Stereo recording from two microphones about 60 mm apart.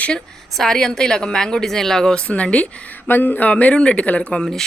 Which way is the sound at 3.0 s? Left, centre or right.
Left.